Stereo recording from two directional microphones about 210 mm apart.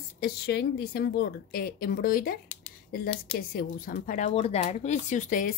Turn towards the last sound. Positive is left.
turn(degrees=40)  # may be behind; listen again after turning